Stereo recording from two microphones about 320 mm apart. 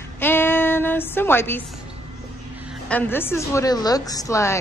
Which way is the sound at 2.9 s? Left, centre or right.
Centre.